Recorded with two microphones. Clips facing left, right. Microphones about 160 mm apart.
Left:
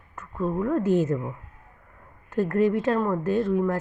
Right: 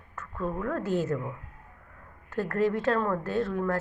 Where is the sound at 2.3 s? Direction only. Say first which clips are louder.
Left 5 dB; 15° left (ahead or behind).